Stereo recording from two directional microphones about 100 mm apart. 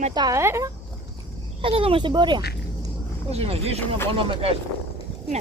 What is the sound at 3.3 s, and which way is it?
Speech, 90° right.